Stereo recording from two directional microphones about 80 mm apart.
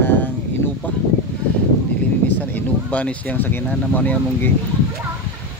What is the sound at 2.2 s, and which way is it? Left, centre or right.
Speech, left.